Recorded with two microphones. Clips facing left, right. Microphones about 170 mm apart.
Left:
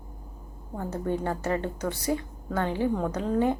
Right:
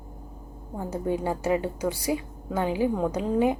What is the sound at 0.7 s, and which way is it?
A woman's voice, 10° right (ahead or behind).